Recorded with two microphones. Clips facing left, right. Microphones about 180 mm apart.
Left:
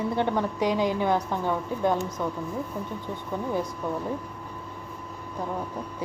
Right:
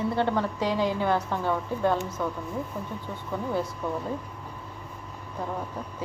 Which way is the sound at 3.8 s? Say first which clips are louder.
Left 1 dB; 15° left (ahead or behind).